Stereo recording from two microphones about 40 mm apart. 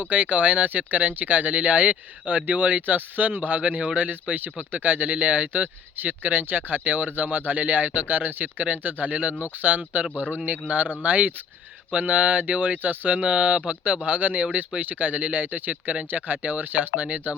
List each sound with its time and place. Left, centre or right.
0.0 s speech: right
9.0 s speech: right
13.1 s speech: right
15.7 s speech: right
16.1 s speech: right